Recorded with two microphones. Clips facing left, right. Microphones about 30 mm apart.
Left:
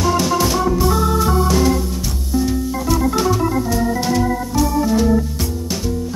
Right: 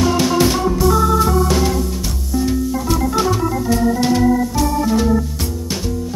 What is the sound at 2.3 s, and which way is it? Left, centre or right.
Music, centre.